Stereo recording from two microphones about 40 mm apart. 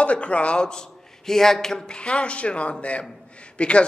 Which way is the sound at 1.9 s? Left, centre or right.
Left.